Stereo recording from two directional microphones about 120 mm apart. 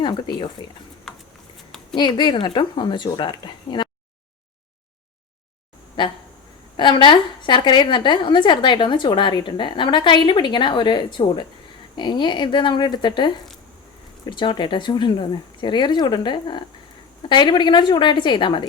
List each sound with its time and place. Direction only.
0.0 s a woman's voice: 40° left (ahead or behind)
2.0 s a woman's voice: 40° left (ahead or behind)
6.7 s a woman's voice: 40° left (ahead or behind)